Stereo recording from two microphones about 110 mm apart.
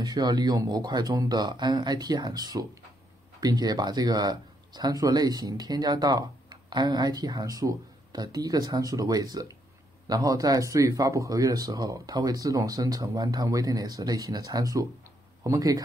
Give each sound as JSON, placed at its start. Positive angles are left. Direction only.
{"t": 0.0, "sound": "speech", "side_deg": -35}